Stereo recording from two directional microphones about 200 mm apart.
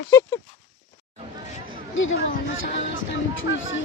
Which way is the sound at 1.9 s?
75° left (ahead or behind).